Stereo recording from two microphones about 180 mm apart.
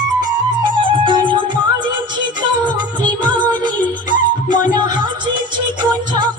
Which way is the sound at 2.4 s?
25° right (ahead or behind).